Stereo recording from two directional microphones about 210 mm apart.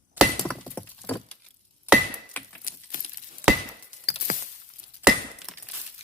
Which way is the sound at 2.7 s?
40° left (ahead or behind).